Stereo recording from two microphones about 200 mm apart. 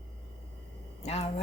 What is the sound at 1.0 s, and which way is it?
Speech, 30° left (ahead or behind).